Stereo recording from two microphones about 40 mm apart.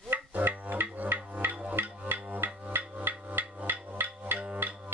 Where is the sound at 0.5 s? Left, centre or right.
Right.